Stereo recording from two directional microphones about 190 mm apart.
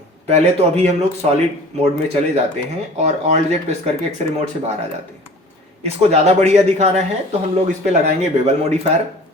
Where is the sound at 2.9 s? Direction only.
35° right (ahead or behind).